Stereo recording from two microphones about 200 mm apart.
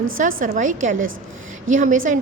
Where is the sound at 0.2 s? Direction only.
45° right (ahead or behind).